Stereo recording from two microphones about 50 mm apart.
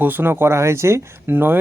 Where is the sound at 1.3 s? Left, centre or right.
Right.